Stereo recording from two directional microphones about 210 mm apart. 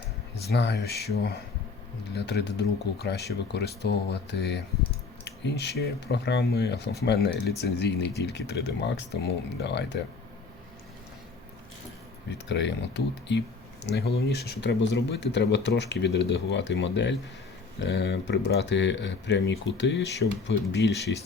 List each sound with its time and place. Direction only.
0.4 s speech: 50° left (ahead or behind)
12.5 s speech: 55° left (ahead or behind)